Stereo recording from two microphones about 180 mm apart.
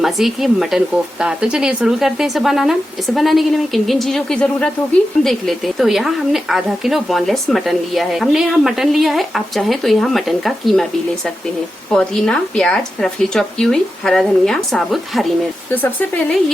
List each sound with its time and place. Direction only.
0.0 s speech: centre (ahead or behind)